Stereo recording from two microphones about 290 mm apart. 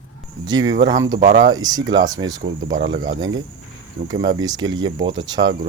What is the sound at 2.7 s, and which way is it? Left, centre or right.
Speech, right.